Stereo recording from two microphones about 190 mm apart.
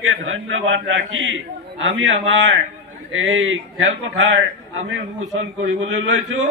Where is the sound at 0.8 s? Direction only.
90° right.